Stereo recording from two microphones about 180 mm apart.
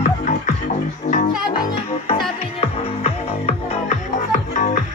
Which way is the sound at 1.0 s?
45° left (ahead or behind).